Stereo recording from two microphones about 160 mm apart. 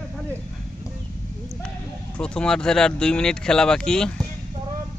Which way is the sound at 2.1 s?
5° left (ahead or behind).